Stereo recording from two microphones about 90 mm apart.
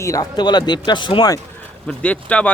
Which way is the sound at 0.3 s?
50° left (ahead or behind).